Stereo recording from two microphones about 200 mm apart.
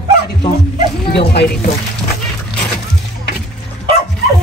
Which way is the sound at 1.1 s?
55° left (ahead or behind).